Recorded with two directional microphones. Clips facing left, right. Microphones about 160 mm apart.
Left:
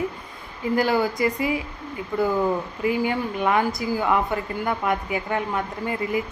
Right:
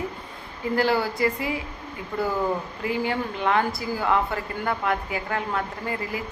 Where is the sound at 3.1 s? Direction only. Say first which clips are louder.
Left 2 dB; 15° left (ahead or behind).